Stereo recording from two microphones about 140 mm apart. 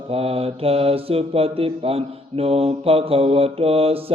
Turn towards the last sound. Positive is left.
turn(degrees=-45)  # may be behind; listen again after turning